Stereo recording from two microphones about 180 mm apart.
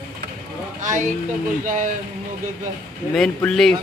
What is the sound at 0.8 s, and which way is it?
Speech, 45° right (ahead or behind).